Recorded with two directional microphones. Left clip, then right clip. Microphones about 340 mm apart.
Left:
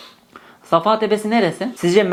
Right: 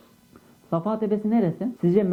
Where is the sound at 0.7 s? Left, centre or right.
Centre.